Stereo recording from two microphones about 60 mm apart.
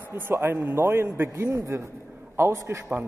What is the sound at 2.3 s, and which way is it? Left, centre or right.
Speech, right.